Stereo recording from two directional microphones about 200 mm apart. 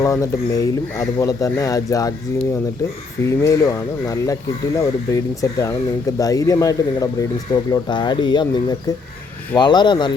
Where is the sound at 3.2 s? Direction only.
15° left (ahead or behind).